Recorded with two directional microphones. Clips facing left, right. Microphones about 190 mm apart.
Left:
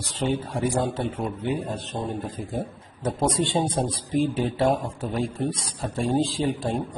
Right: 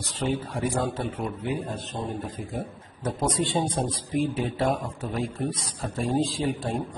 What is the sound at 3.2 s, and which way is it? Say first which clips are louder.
Speech: left 2 dB; 25° left (ahead or behind).